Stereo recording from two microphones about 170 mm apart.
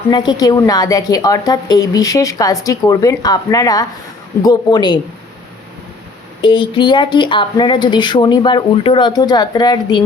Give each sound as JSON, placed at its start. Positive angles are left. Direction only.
{"t": 0.1, "sound": "a woman's voice", "side_deg": 25}
{"t": 6.4, "sound": "a woman's voice", "side_deg": 30}